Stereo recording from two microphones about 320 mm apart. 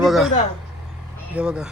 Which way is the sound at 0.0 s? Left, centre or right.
Centre.